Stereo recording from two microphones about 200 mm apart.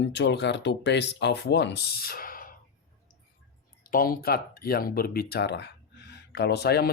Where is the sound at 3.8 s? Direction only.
45° left (ahead or behind).